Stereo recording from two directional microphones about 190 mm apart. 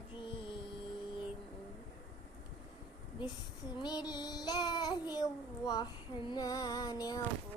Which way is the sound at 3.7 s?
20° left (ahead or behind).